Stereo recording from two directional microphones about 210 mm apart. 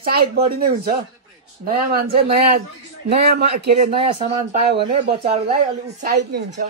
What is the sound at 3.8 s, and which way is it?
Speech, 25° right (ahead or behind).